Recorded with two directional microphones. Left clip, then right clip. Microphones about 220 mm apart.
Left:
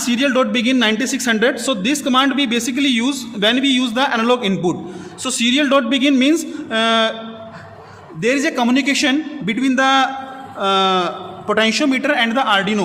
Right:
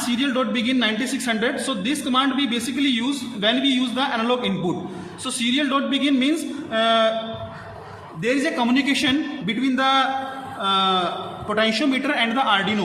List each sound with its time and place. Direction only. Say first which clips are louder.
0.1 s a man's voice: left 8 dB; 50° left (ahead or behind)
8.2 s a man's voice: left 5 dB; 50° left (ahead or behind)